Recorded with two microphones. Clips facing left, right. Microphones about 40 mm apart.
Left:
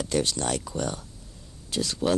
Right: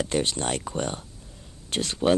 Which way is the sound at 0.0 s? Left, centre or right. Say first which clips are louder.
Right 1 dB; right.